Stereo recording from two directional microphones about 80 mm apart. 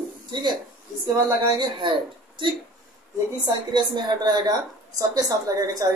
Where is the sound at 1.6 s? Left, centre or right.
Right.